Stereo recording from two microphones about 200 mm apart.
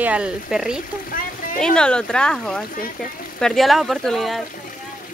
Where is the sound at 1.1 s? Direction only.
45° left (ahead or behind).